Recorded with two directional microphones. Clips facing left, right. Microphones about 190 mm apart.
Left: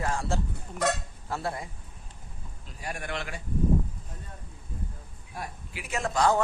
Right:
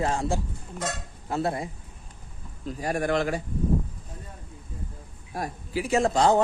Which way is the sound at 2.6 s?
40° right (ahead or behind).